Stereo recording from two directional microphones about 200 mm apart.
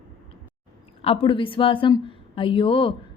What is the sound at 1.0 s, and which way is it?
A woman's voice, 25° left (ahead or behind).